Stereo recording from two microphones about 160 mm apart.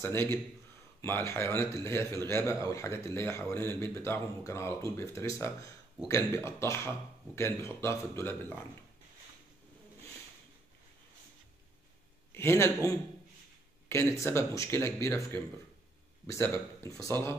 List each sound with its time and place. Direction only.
0.0 s a man's voice: 15° left (ahead or behind)
12.3 s a man's voice: 15° left (ahead or behind)